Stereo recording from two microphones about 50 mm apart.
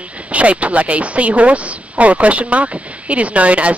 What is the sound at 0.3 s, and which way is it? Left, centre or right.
Speech, right.